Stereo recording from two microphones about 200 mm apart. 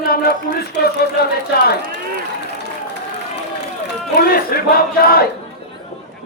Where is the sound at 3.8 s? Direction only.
50° left (ahead or behind).